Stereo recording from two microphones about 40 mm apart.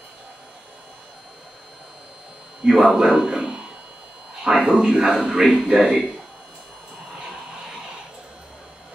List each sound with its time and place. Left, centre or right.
2.6 s speech: centre